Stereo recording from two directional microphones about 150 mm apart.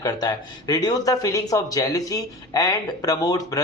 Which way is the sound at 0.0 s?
25° left (ahead or behind).